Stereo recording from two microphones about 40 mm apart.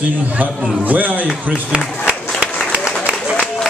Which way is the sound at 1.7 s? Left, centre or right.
Right.